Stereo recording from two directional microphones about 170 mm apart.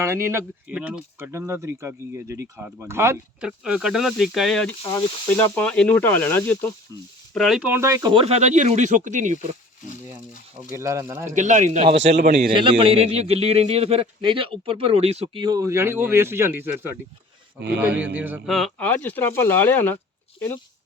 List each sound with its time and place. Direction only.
0.0 s speech: 15° right (ahead or behind)
3.4 s speech: 5° right (ahead or behind); by 6.7 s 10° left (ahead or behind)
6.9 s speech: 20° right (ahead or behind)
7.3 s speech: centre (ahead or behind); by 8.2 s 20° right (ahead or behind)
8.2 s speech: 40° right (ahead or behind)
10.7 s speech: 15° right (ahead or behind)
11.3 s speech: 45° right (ahead or behind)
12.5 s a man's voice: 30° right (ahead or behind); by 18.4 s 10° right (ahead or behind)
18.4 s speech: centre (ahead or behind)